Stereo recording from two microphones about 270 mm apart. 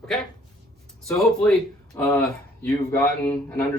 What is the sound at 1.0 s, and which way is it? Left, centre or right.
Speech, centre.